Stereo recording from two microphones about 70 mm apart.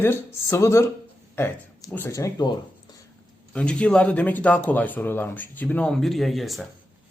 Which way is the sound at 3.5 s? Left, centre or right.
Centre.